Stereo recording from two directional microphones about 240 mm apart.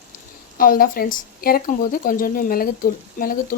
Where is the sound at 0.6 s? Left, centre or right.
Left.